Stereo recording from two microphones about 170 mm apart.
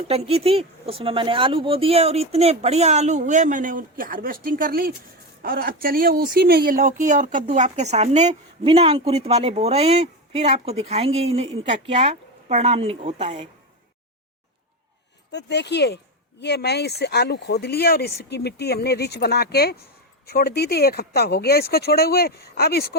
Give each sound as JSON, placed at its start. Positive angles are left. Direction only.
{"t": 0.1, "sound": "speech", "side_deg": -35}
{"t": 15.3, "sound": "speech", "side_deg": 85}
{"t": 18.2, "sound": "speech", "side_deg": 75}